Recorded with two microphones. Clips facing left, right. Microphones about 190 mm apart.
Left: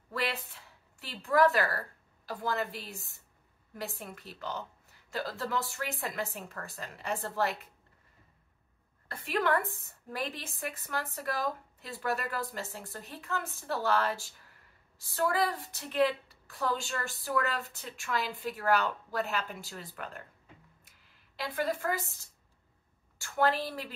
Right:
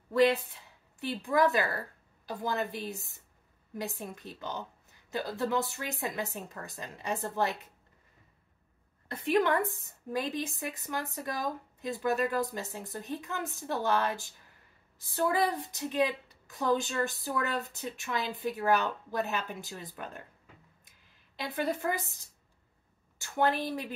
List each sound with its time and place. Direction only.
0.1 s a woman's voice: 20° right (ahead or behind)
9.1 s a woman's voice: 20° right (ahead or behind)
21.4 s a woman's voice: 20° right (ahead or behind)